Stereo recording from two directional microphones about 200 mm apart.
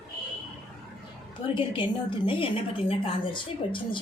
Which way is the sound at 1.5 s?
25° left (ahead or behind).